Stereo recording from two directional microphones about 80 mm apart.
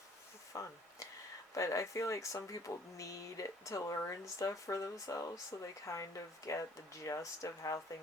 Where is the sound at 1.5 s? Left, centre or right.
Left.